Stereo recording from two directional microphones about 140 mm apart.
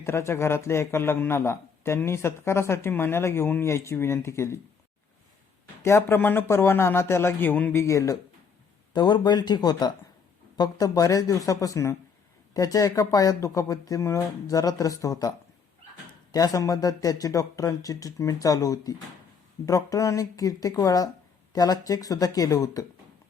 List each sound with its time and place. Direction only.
0.0 s a man's voice: 20° left (ahead or behind)
5.8 s a man's voice: 20° left (ahead or behind)
16.3 s a man's voice: 25° left (ahead or behind)